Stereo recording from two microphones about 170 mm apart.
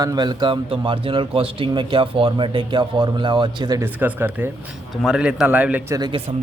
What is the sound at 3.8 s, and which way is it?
A man's voice, 10° right (ahead or behind).